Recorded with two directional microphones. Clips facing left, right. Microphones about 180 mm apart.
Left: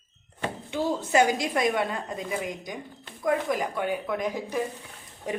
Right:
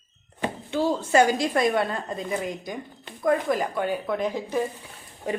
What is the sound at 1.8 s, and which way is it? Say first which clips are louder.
A woman's voice: right 2 dB; 15° left (ahead or behind).